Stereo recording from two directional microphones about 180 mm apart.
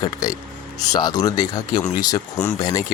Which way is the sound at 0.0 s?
20° left (ahead or behind).